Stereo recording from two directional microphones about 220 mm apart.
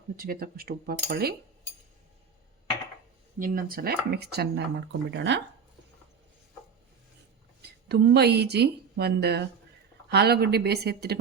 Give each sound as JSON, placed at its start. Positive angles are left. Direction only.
{"t": 0.2, "sound": "speech", "side_deg": -40}
{"t": 3.3, "sound": "speech", "side_deg": -40}
{"t": 7.9, "sound": "speech", "side_deg": -50}